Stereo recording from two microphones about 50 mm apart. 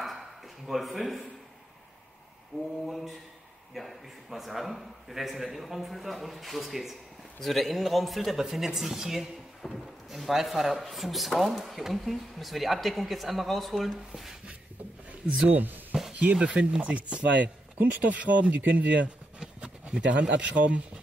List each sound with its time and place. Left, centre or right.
0.7 s speech: centre
2.9 s speech: centre
15.2 s speech: right
15.5 s speech: right
16.3 s speech: centre